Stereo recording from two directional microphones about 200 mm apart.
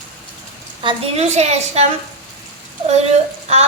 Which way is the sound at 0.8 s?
30° right (ahead or behind).